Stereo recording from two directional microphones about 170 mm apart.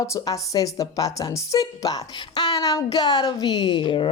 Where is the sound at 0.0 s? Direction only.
20° left (ahead or behind).